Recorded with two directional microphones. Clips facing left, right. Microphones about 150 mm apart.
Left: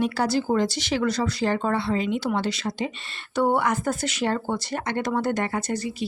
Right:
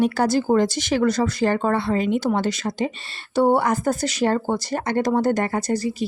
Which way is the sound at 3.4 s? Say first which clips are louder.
Right 4 dB; 35° right (ahead or behind).